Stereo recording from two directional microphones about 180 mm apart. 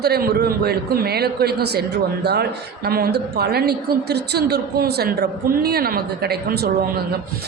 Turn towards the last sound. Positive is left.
turn(degrees=-60)  # may be behind; listen again after turning